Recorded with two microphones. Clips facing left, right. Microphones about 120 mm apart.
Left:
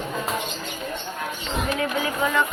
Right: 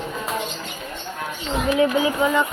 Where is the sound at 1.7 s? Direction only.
20° right (ahead or behind).